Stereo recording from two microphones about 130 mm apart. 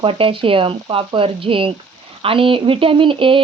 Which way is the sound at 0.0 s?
45° right (ahead or behind).